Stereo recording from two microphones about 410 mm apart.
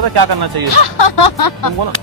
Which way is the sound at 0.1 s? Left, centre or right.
Right.